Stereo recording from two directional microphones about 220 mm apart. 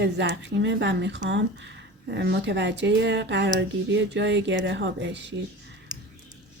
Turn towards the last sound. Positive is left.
turn(degrees=-20)  # may be behind; listen again after turning